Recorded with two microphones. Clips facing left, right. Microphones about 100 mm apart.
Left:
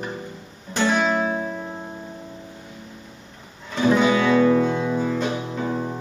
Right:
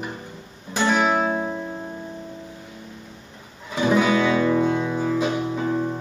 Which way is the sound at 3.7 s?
5° right (ahead or behind).